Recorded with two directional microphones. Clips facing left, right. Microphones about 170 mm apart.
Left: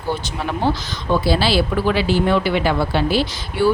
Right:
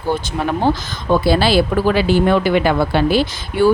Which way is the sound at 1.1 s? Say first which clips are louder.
Right 3 dB; 50° right (ahead or behind).